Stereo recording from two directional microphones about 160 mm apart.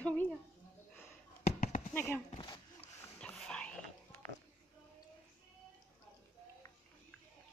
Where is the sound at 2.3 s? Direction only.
35° left (ahead or behind).